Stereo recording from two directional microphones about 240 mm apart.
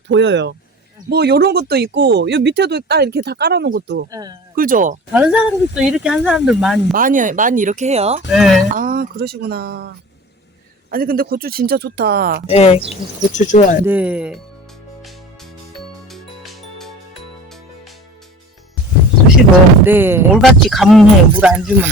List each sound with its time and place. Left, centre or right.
0.1 s speech: right
4.1 s speech: centre
4.5 s speech: right
5.1 s speech: centre
6.9 s speech: right
8.3 s speech: centre
8.7 s speech: right
10.9 s speech: right
12.5 s speech: left
13.8 s speech: centre
16.0 s music: centre
19.8 s speech: centre